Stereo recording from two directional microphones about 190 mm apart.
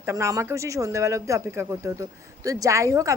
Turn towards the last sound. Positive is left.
turn(degrees=-15)  # may be behind; listen again after turning